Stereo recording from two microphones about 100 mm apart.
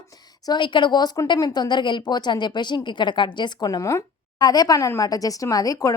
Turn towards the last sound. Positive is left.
turn(degrees=35)  # may be behind; listen again after turning